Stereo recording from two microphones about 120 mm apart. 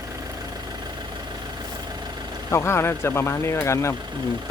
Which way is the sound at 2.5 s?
20° left (ahead or behind).